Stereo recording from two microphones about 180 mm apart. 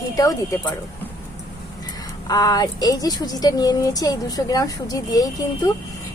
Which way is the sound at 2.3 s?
20° left (ahead or behind).